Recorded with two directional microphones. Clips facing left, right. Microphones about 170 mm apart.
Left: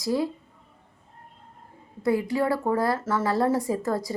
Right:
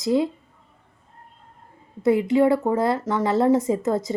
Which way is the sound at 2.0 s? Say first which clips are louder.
Right 6 dB; 20° right (ahead or behind).